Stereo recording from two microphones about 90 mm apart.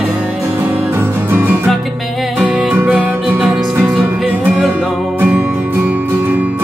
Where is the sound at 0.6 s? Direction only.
25° right (ahead or behind).